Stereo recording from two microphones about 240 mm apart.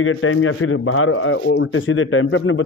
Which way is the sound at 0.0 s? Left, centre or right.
Left.